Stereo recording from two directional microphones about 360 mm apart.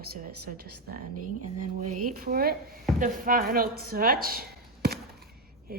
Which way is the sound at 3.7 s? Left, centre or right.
Right.